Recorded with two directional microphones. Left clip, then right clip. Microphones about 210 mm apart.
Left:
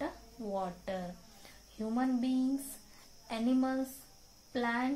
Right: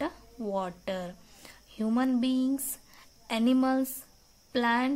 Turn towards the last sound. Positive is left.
turn(degrees=-45)  # may be behind; listen again after turning